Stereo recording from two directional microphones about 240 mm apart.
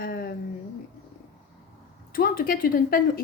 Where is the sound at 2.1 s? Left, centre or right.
Left.